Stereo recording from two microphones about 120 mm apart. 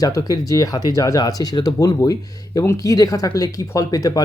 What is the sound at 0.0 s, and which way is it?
Speech, 30° left (ahead or behind).